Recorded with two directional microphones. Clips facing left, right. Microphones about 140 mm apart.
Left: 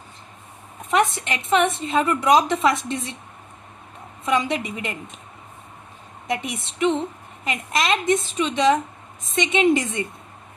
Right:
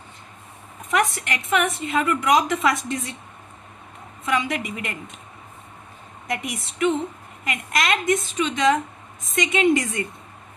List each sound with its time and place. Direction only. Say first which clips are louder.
0.9 s a woman's voice: left 2 dB; 25° left (ahead or behind)
4.3 s a woman's voice: left 2 dB; 30° left (ahead or behind)
6.3 s a woman's voice: left 2 dB; 30° left (ahead or behind)